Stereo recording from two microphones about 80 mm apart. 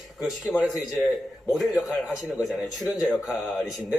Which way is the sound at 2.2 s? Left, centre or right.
Centre.